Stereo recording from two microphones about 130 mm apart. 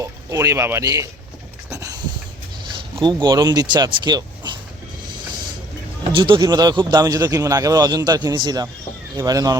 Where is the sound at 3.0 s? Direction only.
35° right (ahead or behind).